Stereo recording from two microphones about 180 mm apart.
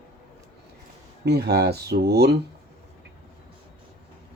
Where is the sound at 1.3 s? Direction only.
65° right (ahead or behind).